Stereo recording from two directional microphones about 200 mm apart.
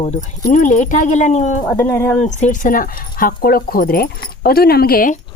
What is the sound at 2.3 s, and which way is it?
Speech, 40° left (ahead or behind).